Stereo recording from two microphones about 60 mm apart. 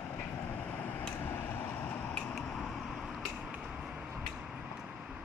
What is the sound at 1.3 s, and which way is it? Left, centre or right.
Vehicle, left.